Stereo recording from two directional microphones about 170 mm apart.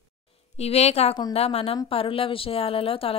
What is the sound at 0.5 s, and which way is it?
Speech, 40° left (ahead or behind).